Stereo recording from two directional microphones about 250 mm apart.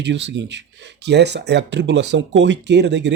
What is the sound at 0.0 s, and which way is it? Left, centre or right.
Speech, right.